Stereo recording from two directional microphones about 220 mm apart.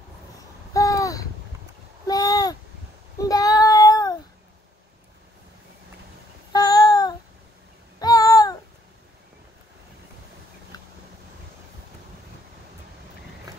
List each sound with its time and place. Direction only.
0.7 s babbling: 15° left (ahead or behind)
2.0 s a sound: 15° left (ahead or behind)
3.2 s child singing: 15° left (ahead or behind)
6.5 s child singing: 15° left (ahead or behind)
8.0 s babbling: 15° left (ahead or behind)